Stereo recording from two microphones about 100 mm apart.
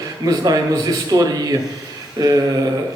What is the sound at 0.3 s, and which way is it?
A man's voice, 40° right (ahead or behind).